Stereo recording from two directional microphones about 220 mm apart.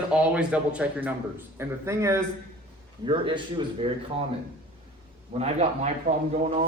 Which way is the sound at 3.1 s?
25° right (ahead or behind).